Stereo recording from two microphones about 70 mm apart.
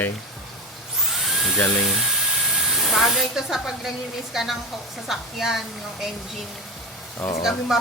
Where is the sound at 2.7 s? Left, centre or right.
Centre.